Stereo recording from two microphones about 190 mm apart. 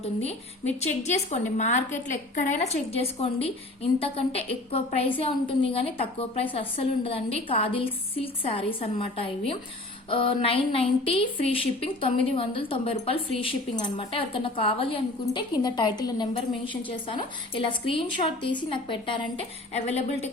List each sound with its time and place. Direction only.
0.0 s a woman's voice: 35° left (ahead or behind)